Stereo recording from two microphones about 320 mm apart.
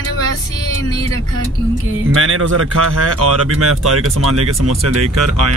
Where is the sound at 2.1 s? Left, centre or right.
Right.